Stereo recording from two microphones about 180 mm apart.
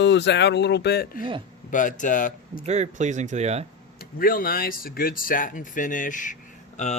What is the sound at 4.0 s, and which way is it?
Speech, 55° left (ahead or behind).